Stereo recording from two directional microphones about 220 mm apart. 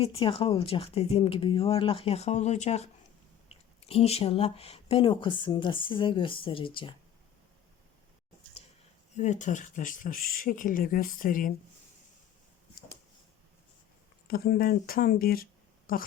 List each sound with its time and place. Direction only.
0.0 s speech: 25° left (ahead or behind)
9.1 s speech: 30° left (ahead or behind)
14.3 s speech: 45° left (ahead or behind)